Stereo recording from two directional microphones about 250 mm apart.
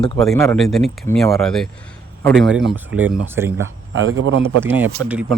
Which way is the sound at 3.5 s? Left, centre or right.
Right.